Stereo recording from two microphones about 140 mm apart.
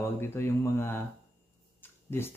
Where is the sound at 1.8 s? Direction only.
15° left (ahead or behind).